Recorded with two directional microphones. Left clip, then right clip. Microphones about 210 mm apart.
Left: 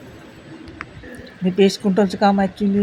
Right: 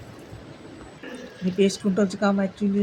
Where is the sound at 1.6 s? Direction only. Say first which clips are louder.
Left 6 dB; 20° left (ahead or behind).